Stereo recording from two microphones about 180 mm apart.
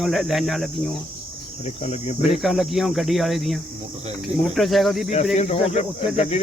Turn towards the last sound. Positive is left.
turn(degrees=35)  # may be behind; listen again after turning